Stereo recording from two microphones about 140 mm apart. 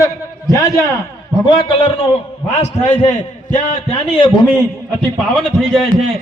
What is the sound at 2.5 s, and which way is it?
A man's voice, 55° left (ahead or behind).